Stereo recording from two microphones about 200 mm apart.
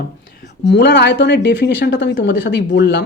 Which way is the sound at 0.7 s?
60° left (ahead or behind).